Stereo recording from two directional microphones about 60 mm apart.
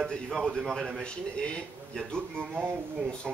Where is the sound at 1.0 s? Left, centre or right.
Centre.